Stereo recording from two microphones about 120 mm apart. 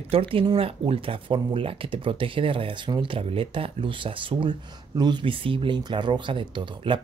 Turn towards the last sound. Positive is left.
turn(degrees=-45)  # may be behind; listen again after turning